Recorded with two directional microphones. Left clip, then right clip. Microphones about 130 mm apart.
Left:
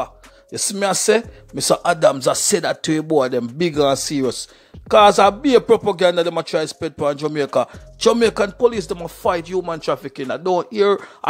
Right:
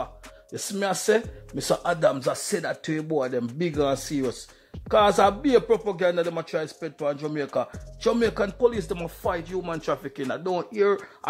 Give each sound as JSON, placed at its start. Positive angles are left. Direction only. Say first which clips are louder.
{"t": 0.0, "sound": "speech", "louder": "left 7 dB", "side_deg": 30}
{"t": 9.7, "sound": "speech", "louder": "left 6 dB", "side_deg": 30}